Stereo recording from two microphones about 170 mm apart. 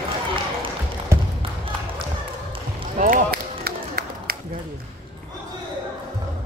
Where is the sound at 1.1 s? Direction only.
15° right (ahead or behind).